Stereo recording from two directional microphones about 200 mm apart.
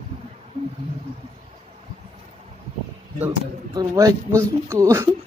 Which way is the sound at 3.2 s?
15° right (ahead or behind).